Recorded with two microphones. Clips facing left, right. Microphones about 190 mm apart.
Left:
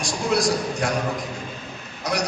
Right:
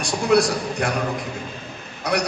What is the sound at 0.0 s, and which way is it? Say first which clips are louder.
Speech: right 4 dB; 60° right (ahead or behind).